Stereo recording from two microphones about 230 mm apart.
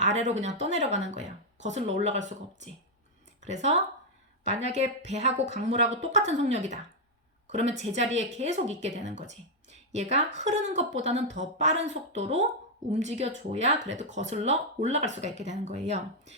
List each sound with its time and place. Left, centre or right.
0.0 s speech: right